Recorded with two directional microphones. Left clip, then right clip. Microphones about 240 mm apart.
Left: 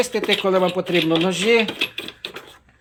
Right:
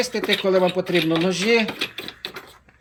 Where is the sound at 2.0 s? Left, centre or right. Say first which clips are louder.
Left 2 dB; centre.